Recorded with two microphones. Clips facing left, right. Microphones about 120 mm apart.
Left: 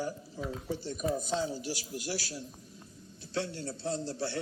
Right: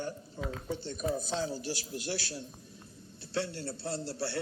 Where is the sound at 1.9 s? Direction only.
25° right (ahead or behind).